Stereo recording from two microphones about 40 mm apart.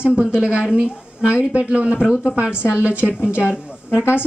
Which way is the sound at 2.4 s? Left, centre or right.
Right.